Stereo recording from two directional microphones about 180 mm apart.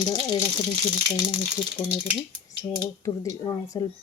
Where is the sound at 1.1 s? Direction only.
5° right (ahead or behind).